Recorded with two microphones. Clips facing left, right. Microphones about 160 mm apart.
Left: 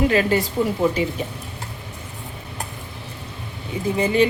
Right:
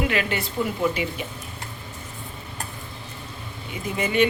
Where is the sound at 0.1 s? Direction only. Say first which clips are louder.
Left 7 dB; 35° left (ahead or behind).